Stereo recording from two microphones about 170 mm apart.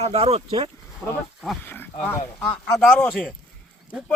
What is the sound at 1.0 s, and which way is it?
Speech, 10° left (ahead or behind).